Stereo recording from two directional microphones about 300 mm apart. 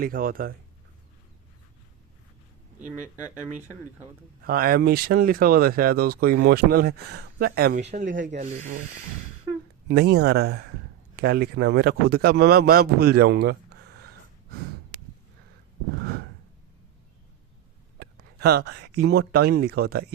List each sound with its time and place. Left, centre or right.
0.0 s speech: right
4.4 s speech: right
9.9 s a man's voice: right
18.0 s speech: right